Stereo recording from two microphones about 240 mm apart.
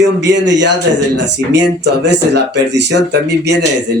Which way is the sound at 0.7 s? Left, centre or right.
Right.